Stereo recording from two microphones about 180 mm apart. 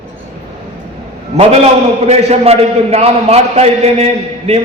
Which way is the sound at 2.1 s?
35° right (ahead or behind).